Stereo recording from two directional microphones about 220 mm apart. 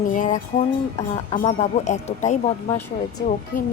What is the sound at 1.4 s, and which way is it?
Speech, 30° left (ahead or behind).